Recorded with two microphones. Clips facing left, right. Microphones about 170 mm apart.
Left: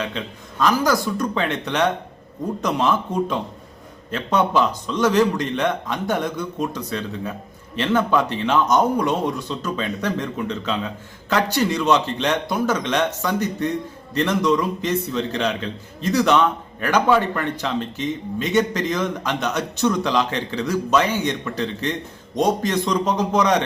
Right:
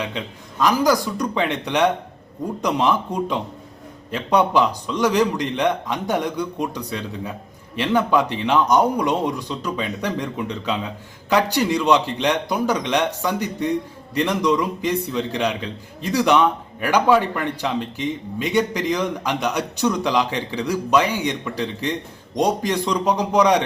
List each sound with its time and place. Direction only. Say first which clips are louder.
0.0 s a man's voice: even; 15° right (ahead or behind)